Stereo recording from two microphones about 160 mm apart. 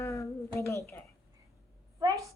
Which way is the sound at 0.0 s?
20° left (ahead or behind).